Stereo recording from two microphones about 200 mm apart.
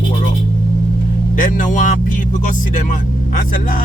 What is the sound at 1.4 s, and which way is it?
Speech, 40° left (ahead or behind).